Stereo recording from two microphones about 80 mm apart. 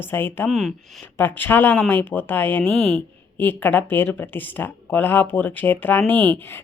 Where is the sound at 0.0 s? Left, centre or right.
Left.